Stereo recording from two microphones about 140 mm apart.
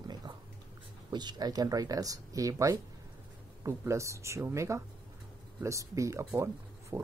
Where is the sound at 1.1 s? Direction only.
30° right (ahead or behind).